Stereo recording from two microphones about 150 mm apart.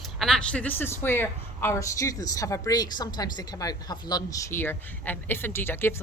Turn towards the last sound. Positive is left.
turn(degrees=15)  # may be behind; listen again after turning